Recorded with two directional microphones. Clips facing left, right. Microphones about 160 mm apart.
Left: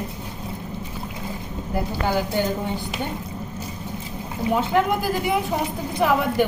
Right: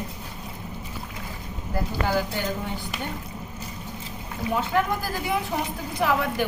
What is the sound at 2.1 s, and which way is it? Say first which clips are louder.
Speech: left 5 dB; 20° left (ahead or behind).